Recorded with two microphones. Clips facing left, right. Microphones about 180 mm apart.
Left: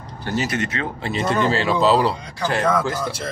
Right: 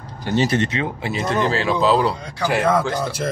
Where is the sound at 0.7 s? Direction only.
15° right (ahead or behind).